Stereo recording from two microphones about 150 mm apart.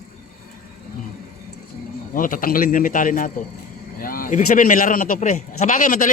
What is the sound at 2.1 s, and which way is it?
A man's voice, 65° left (ahead or behind).